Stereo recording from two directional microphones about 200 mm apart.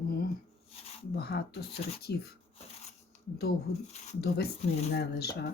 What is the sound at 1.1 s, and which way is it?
Speech, 55° left (ahead or behind).